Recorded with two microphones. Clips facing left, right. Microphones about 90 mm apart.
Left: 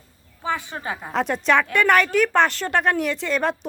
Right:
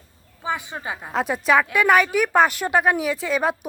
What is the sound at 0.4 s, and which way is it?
Speech, 15° right (ahead or behind).